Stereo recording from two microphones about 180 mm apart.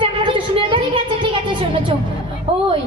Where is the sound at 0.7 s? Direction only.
30° right (ahead or behind).